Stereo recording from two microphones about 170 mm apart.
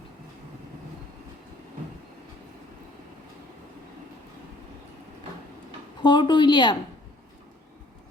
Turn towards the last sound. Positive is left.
turn(degrees=25)  # may be behind; listen again after turning